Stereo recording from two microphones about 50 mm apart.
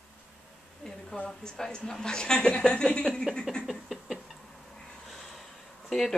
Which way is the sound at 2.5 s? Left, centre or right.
Centre.